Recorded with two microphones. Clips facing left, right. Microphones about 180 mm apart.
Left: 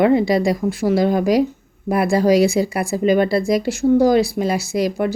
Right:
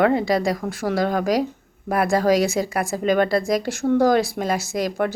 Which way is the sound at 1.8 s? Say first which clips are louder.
Left 3 dB; 45° right (ahead or behind).